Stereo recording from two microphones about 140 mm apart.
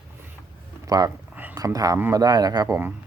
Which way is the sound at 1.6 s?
25° right (ahead or behind).